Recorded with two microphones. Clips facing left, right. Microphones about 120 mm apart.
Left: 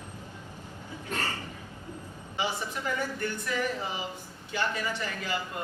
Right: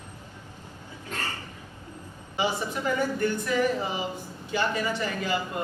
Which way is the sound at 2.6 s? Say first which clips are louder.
Right 5 dB; 20° right (ahead or behind).